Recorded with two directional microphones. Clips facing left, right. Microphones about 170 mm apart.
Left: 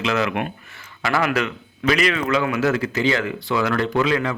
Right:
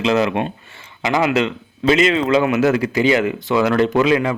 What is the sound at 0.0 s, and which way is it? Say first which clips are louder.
Speech: right 5 dB; 30° right (ahead or behind).